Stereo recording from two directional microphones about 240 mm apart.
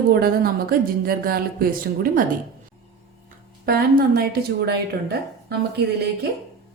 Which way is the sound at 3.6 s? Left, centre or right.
Right.